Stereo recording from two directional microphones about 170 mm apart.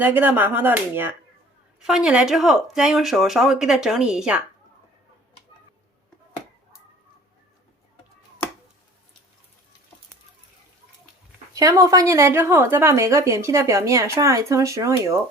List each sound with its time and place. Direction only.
0.0 s a woman's voice: 10° right (ahead or behind)
11.5 s a woman's voice: 20° right (ahead or behind)